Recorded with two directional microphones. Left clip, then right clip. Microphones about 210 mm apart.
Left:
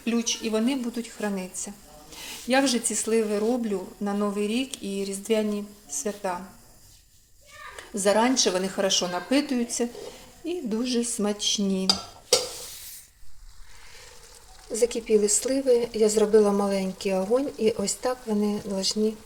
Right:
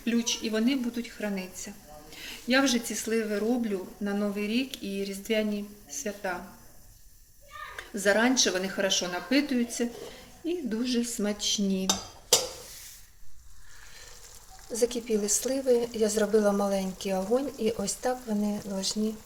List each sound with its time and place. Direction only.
0.0 s speech: 15° left (ahead or behind)
7.8 s speech: 20° left (ahead or behind)
14.7 s a woman's voice: 10° left (ahead or behind)